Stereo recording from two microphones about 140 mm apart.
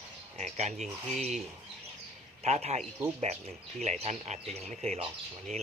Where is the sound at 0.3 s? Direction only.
55° right (ahead or behind).